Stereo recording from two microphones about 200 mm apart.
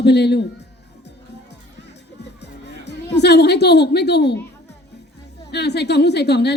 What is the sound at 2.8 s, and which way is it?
A woman's voice, 55° left (ahead or behind).